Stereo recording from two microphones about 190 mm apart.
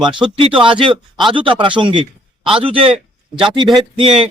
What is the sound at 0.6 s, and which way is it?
Speech, 25° right (ahead or behind).